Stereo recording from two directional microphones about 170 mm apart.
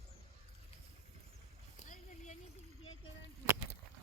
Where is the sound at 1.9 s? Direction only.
45° left (ahead or behind).